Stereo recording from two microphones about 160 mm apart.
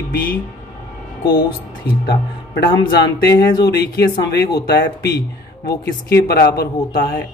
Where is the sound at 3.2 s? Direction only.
90° left; by 7.1 s 75° left (ahead or behind).